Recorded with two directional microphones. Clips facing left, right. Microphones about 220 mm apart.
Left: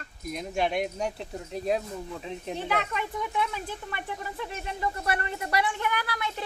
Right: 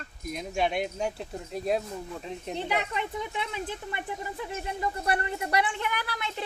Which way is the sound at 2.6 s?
15° right (ahead or behind).